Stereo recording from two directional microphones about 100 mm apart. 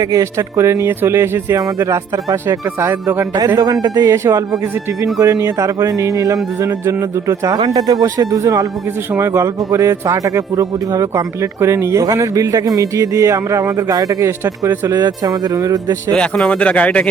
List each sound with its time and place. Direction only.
0.0 s speech: 35° right (ahead or behind)
3.3 s speech: 40° right (ahead or behind)
14.8 s speech: 40° right (ahead or behind)
16.1 s speech: 10° left (ahead or behind)